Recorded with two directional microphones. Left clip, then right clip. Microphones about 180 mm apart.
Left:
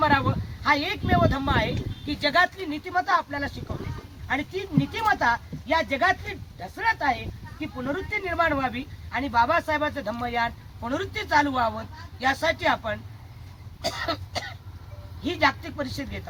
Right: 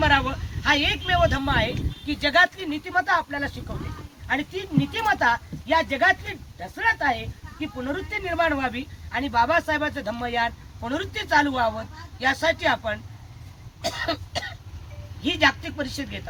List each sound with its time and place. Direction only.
0.0 s speech: 5° left (ahead or behind)
13.8 s throat clearing: centre (ahead or behind)
15.2 s speech: centre (ahead or behind)